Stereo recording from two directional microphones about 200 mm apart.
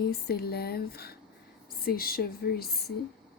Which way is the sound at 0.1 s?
50° left (ahead or behind).